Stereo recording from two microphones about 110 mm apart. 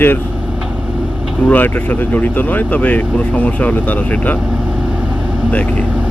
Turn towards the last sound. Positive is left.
turn(degrees=15)  # may be behind; listen again after turning